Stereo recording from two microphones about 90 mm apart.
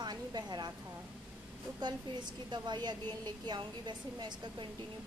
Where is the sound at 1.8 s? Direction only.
55° right (ahead or behind).